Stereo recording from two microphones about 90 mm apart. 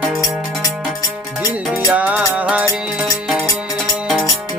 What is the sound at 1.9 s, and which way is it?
Music, 15° right (ahead or behind).